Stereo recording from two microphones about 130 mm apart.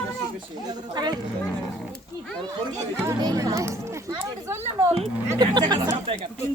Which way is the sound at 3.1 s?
30° right (ahead or behind).